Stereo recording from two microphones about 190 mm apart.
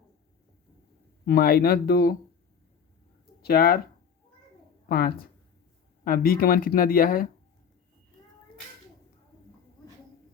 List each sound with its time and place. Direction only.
1.2 s speech: 55° left (ahead or behind)
3.4 s speech: 55° left (ahead or behind)
4.9 s speech: 55° left (ahead or behind)